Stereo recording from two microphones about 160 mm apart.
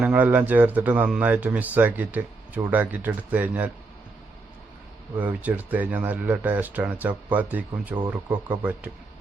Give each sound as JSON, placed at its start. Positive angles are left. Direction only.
{"t": 0.0, "sound": "speech", "side_deg": -10}
{"t": 5.1, "sound": "speech", "side_deg": -10}